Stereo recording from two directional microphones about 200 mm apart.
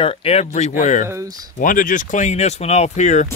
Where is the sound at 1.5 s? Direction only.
45° left (ahead or behind).